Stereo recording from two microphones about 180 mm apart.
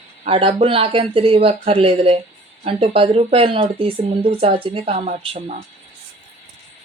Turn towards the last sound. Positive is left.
turn(degrees=-35)  # may be behind; listen again after turning